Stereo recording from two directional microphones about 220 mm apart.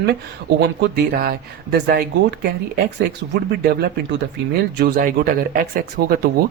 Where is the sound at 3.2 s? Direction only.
45° right (ahead or behind).